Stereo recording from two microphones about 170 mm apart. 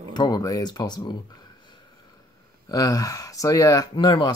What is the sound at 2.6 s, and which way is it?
Speech, 20° left (ahead or behind).